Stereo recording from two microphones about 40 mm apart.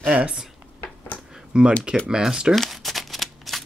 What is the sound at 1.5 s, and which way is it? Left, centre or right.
Speech, right.